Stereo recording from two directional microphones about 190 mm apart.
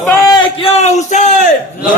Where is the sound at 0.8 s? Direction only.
40° left (ahead or behind).